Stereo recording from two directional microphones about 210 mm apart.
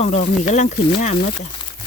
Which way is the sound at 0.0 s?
35° left (ahead or behind).